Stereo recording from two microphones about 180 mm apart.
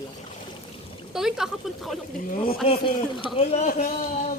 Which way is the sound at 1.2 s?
5° right (ahead or behind).